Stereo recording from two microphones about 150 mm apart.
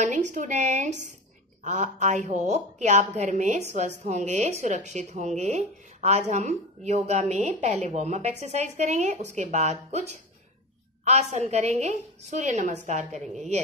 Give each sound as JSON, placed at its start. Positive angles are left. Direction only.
{"t": 0.0, "sound": "a woman's voice", "side_deg": -50}
{"t": 11.1, "sound": "a woman's voice", "side_deg": -50}